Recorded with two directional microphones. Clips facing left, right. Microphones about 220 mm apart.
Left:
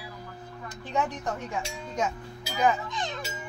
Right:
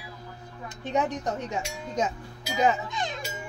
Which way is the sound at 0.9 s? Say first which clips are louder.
Right 3 dB; 20° right (ahead or behind).